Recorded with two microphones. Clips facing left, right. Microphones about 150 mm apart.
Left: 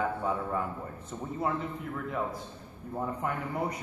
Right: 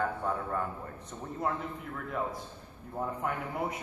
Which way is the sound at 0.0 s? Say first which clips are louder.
Left 2 dB; 5° left (ahead or behind).